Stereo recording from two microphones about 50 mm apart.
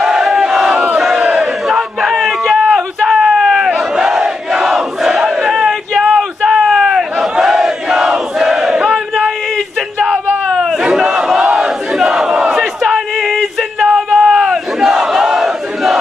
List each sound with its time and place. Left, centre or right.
0.0 s battle cry: centre
1.4 s a sound: centre
5.2 s battle cry: centre
10.5 s battle cry: centre
11.6 s crowd: centre
13.2 s a sound: centre
13.9 s battle cry: centre